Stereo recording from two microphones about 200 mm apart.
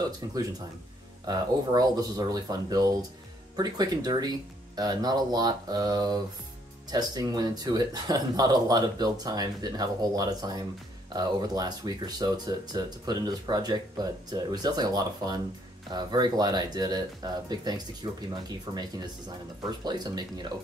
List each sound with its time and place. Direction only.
0.0 s speech: 20° right (ahead or behind)